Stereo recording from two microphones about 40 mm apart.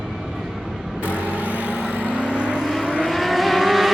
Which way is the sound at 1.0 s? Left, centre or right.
Left.